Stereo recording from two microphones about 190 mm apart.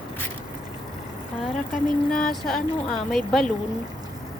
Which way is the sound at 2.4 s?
5° left (ahead or behind).